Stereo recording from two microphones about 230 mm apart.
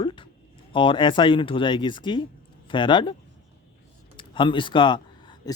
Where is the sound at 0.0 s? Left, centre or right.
Left.